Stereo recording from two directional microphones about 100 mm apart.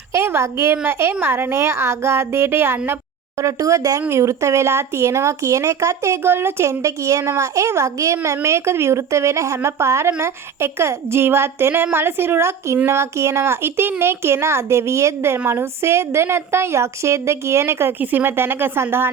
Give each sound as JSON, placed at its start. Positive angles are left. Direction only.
{"t": 0.1, "sound": "a woman's voice", "side_deg": -25}
{"t": 3.4, "sound": "a woman's voice", "side_deg": -35}